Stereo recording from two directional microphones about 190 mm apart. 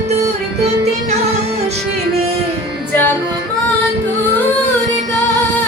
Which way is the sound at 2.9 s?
10° left (ahead or behind).